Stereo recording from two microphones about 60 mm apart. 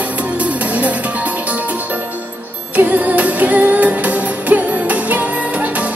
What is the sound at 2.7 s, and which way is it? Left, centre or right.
Music, right.